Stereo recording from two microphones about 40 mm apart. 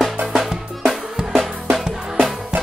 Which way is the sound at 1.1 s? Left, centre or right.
Centre.